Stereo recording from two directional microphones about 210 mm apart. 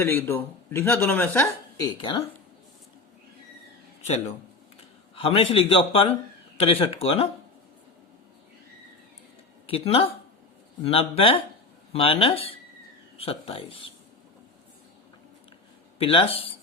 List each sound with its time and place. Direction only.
0.0 s speech: 10° left (ahead or behind)
2.0 s a man's voice: 25° left (ahead or behind)
5.1 s a man's voice: 25° left (ahead or behind)
9.6 s a man's voice: 25° left (ahead or behind)
16.0 s a man's voice: 25° left (ahead or behind)